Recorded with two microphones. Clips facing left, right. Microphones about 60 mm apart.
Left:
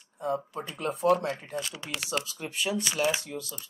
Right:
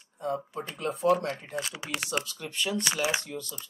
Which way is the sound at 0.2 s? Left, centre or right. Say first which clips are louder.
Left 1 dB; centre.